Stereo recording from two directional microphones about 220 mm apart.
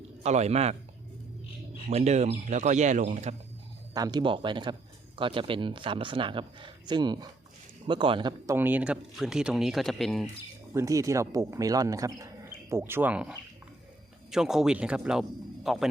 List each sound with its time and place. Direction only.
0.2 s speech: 30° right (ahead or behind)
1.9 s speech: 30° right (ahead or behind)
3.9 s speech: 20° right (ahead or behind)
8.5 s speech: 10° right (ahead or behind)
10.8 s speech: 15° right (ahead or behind)